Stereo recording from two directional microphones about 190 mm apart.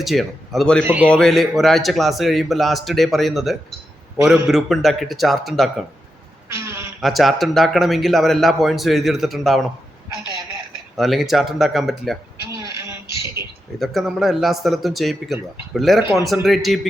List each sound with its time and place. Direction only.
0.0 s speech: centre (ahead or behind)
6.5 s a sound: 15° right (ahead or behind)
7.0 s speech: centre (ahead or behind)
10.9 s speech: centre (ahead or behind)
12.7 s a sound: 15° right (ahead or behind)
13.7 s speech: centre (ahead or behind)